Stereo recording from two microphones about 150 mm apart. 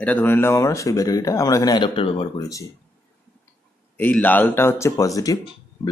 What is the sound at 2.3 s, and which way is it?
Speech, 20° left (ahead or behind).